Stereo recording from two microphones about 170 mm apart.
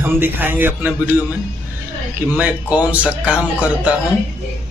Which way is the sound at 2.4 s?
10° right (ahead or behind).